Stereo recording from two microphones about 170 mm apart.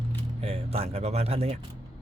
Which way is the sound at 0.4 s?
35° right (ahead or behind).